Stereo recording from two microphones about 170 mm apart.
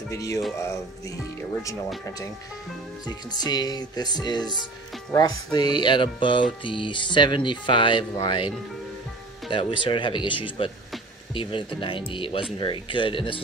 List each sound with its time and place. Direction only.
0.1 s music: 20° left (ahead or behind)
3.1 s music: 25° left (ahead or behind)
11.8 s speech: 30° left (ahead or behind)
12.5 s music: 30° left (ahead or behind)